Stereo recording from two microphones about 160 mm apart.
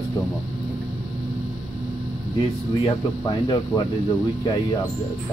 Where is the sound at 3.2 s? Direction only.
25° left (ahead or behind).